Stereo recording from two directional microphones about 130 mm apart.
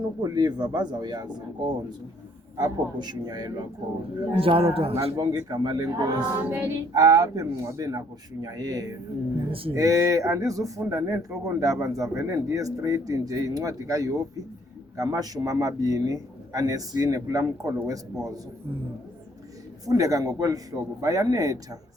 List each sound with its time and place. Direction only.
0.2 s speech: 30° right (ahead or behind)
4.3 s a man's voice: 45° right (ahead or behind)
5.1 s speech: 30° right (ahead or behind)
6.4 s child singing: 15° right (ahead or behind)
6.9 s a man's voice: 25° right (ahead or behind)
9.5 s a man's voice: 45° right (ahead or behind)
9.7 s a man's voice: 25° right (ahead or behind)
19.8 s a man's voice: 25° right (ahead or behind)